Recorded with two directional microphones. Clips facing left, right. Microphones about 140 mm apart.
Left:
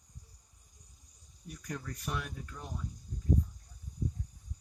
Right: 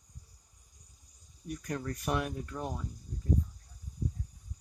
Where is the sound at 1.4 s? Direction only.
55° right (ahead or behind).